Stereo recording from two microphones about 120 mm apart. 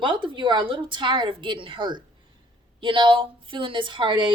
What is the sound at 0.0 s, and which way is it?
Speech, 45° right (ahead or behind).